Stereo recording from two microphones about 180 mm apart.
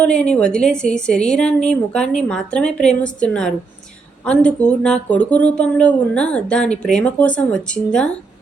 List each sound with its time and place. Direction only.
0.0 s speech: 5° left (ahead or behind)